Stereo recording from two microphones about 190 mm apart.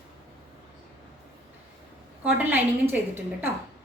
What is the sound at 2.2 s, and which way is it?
A woman's voice, 10° right (ahead or behind).